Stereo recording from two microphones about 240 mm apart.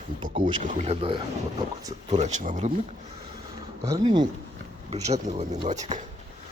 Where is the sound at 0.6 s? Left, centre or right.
Right.